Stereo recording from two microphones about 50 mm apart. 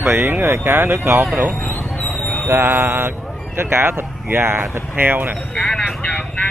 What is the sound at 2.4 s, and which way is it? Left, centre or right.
Speech, right.